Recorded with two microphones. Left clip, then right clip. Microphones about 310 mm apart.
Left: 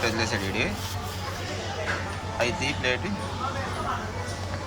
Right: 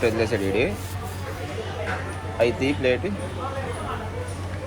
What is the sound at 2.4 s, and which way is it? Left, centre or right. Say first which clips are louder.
Speech: right 5 dB; centre.